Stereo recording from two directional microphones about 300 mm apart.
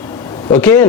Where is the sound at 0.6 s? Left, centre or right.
Centre.